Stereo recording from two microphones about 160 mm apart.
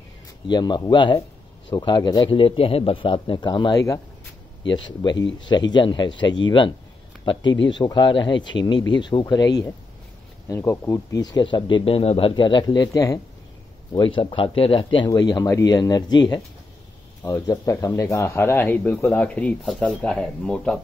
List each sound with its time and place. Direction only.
0.5 s speech: 25° left (ahead or behind)
5.0 s speech: 25° left (ahead or behind)
10.5 s speech: 15° left (ahead or behind)